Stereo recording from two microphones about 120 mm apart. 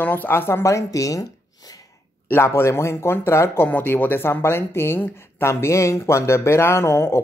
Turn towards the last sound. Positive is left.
turn(degrees=25)  # may be behind; listen again after turning